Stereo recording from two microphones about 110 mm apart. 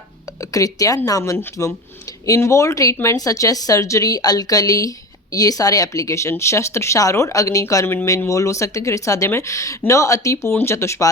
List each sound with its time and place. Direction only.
0.5 s speech: 30° left (ahead or behind)